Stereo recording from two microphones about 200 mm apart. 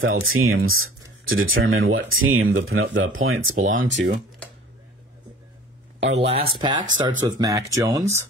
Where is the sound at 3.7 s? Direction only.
70° right (ahead or behind).